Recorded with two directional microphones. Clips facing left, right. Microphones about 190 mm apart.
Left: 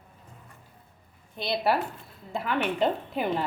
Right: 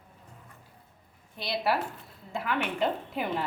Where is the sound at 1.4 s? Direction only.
25° left (ahead or behind).